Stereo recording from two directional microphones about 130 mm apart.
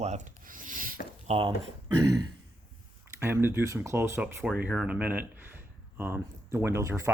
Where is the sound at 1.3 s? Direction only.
45° right (ahead or behind).